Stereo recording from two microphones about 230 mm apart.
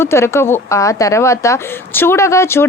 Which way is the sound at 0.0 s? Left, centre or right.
Centre.